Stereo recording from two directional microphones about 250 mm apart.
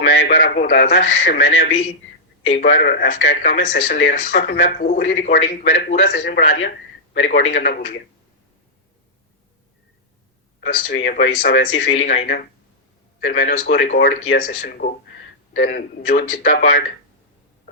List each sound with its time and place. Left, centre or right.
0.0 s speech: left
10.8 s speech: left
11.9 s speech: left
13.2 s speech: left